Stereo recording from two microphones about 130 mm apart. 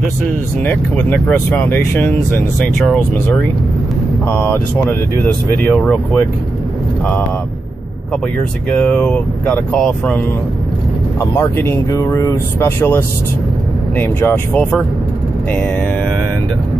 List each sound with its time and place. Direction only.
0.7 s speech: 10° left (ahead or behind)
2.8 s speech: 5° left (ahead or behind)
4.3 s speech: 15° left (ahead or behind)
8.6 s speech: 10° left (ahead or behind)
11.1 s speech: 20° left (ahead or behind)